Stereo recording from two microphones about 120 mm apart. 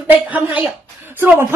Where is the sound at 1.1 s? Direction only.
15° right (ahead or behind).